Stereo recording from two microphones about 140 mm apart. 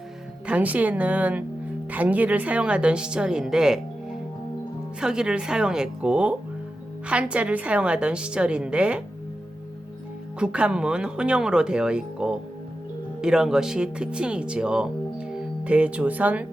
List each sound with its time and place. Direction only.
0.4 s a woman's voice: 10° right (ahead or behind)
4.9 s a woman's voice: 5° right (ahead or behind)
10.4 s a woman's voice: 10° right (ahead or behind)